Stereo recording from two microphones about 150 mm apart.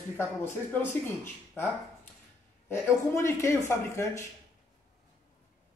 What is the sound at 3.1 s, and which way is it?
Speech, 20° left (ahead or behind).